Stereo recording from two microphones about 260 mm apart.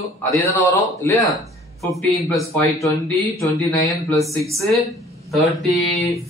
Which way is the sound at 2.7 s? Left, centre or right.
Centre.